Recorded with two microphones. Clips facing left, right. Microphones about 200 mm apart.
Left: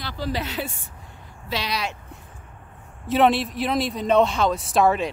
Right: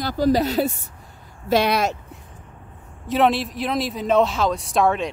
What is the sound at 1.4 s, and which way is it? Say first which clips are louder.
Speech: right 9 dB; 50° right (ahead or behind).